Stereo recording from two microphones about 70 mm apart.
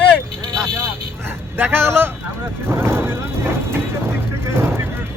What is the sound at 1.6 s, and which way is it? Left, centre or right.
Speech, right.